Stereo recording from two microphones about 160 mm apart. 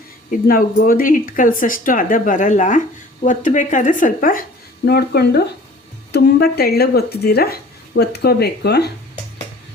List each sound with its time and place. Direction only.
0.3 s speech: 60° left (ahead or behind)
4.9 s speech: 85° left